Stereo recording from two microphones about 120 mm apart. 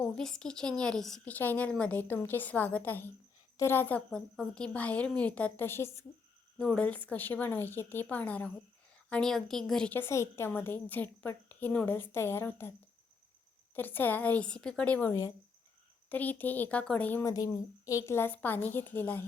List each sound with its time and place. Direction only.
0.2 s a woman's voice: 5° left (ahead or behind)
6.6 s a woman's voice: 10° left (ahead or behind)
9.9 s a woman's voice: 20° left (ahead or behind)
13.7 s a woman's voice: 15° left (ahead or behind)
17.2 s a woman's voice: 30° left (ahead or behind)